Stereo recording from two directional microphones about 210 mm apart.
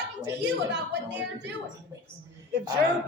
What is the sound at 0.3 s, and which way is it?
A woman's voice, 55° right (ahead or behind).